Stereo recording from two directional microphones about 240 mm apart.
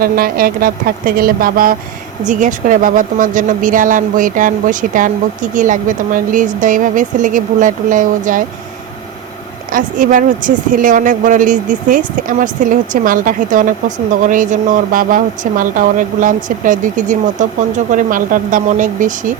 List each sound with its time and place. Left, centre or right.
0.0 s a woman's voice: right
9.7 s a woman's voice: right